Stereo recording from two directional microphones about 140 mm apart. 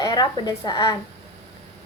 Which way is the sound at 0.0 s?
30° left (ahead or behind).